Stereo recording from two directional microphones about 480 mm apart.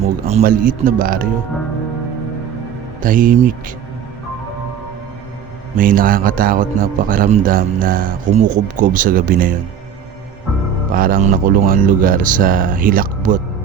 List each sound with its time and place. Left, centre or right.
0.0 s a man's voice: centre
3.0 s a man's voice: centre
5.7 s a man's voice: centre
10.9 s a man's voice: centre